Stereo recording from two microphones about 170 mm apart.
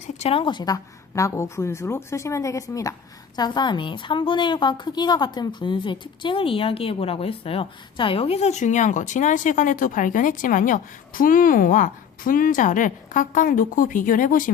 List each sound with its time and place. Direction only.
0.2 s a woman's voice: 35° left (ahead or behind); by 14.5 s 50° left (ahead or behind)